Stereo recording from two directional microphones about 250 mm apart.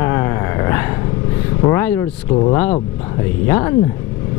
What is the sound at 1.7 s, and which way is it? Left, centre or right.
Speech, centre.